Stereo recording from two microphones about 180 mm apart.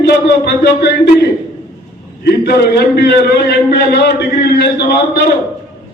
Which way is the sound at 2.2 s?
60° left (ahead or behind).